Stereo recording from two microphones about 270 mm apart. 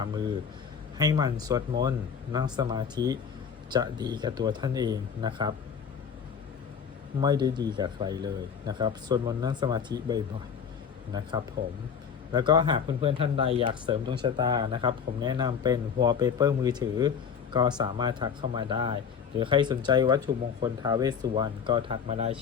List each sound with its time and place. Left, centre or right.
0.0 s speech: centre
7.2 s speech: centre